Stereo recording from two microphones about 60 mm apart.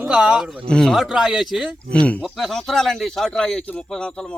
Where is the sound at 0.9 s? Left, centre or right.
Centre.